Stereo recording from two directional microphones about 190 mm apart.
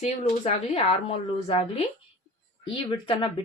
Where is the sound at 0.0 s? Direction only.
35° left (ahead or behind).